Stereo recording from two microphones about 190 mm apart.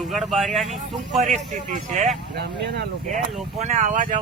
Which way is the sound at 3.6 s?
40° right (ahead or behind).